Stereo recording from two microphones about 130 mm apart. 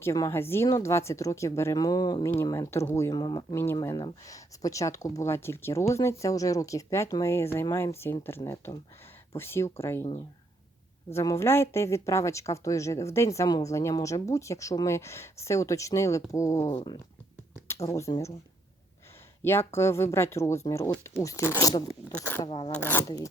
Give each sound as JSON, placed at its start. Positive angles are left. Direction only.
{"t": 0.0, "sound": "speech", "side_deg": 20}
{"t": 2.4, "sound": "speech", "side_deg": 20}
{"t": 3.5, "sound": "speech", "side_deg": 20}
{"t": 11.1, "sound": "speech", "side_deg": 20}
{"t": 19.4, "sound": "speech", "side_deg": 20}
{"t": 22.1, "sound": "speech", "side_deg": 15}